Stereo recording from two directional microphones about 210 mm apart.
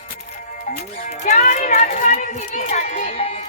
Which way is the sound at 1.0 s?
35° left (ahead or behind).